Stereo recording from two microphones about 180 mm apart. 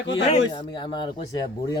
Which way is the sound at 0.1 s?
30° left (ahead or behind).